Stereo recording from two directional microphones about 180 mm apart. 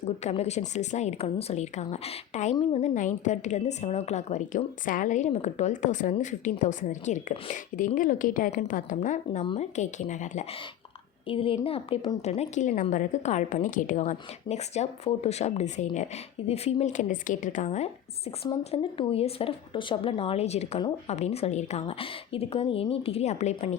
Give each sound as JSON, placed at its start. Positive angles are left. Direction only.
{"t": 0.0, "sound": "a woman's voice", "side_deg": 35}
{"t": 11.3, "sound": "a woman's voice", "side_deg": 30}